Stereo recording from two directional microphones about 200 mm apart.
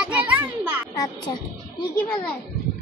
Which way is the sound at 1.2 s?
20° left (ahead or behind).